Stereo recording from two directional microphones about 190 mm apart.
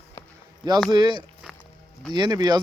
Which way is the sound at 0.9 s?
25° right (ahead or behind).